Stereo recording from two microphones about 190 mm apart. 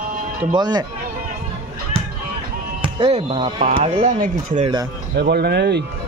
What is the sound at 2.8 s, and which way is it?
Speech, 30° right (ahead or behind).